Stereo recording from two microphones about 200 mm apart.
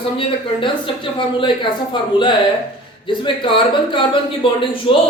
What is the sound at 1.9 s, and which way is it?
A man's voice, 25° left (ahead or behind).